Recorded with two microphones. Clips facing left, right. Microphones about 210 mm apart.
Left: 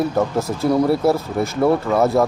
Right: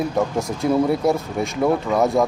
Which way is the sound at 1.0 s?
Centre (ahead or behind).